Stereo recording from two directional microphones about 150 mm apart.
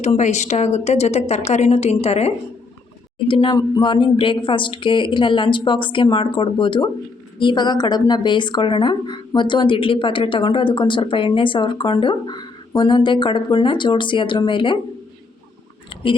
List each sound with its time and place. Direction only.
0.0 s a woman's voice: 50° left (ahead or behind)
3.2 s a woman's voice: 30° left (ahead or behind)